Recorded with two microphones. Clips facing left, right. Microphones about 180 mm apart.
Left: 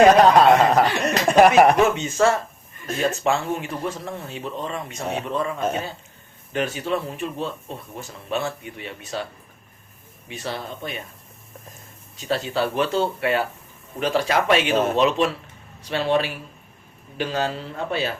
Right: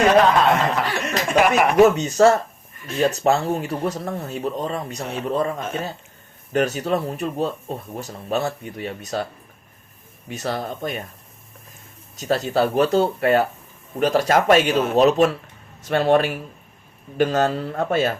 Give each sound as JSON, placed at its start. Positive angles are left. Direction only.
{"t": 0.3, "sound": "speech", "side_deg": 40}
{"t": 1.8, "sound": "speech", "side_deg": -40}
{"t": 10.2, "sound": "a man's voice", "side_deg": -45}
{"t": 12.1, "sound": "a man's voice", "side_deg": -40}